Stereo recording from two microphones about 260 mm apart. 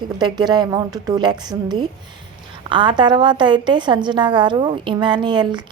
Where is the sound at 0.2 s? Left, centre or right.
Centre.